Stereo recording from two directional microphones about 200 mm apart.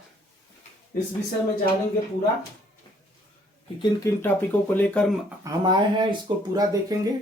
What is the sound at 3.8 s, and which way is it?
Speech, 15° left (ahead or behind).